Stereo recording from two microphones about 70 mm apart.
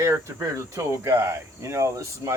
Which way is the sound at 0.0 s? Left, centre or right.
Right.